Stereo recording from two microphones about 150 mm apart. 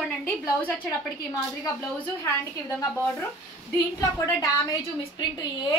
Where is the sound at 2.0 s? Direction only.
15° left (ahead or behind).